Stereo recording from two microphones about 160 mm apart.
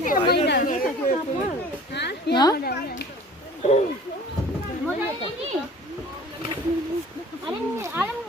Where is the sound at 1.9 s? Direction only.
90° left.